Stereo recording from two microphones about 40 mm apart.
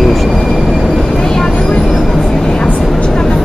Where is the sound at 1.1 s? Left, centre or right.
Centre.